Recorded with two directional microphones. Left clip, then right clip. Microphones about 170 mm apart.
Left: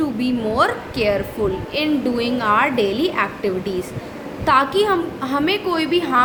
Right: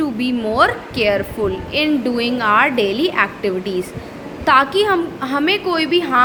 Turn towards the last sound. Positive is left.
turn(degrees=-10)  # may be behind; listen again after turning